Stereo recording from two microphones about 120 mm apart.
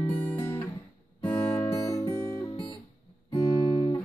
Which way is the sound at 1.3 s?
25° left (ahead or behind).